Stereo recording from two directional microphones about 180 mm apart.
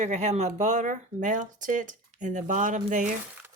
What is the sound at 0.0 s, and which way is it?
Speech, 40° right (ahead or behind).